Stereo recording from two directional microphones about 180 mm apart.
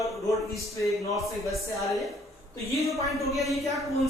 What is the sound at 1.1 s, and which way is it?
Speech, centre (ahead or behind).